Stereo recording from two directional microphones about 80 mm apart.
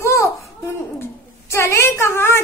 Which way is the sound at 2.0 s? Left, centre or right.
Left.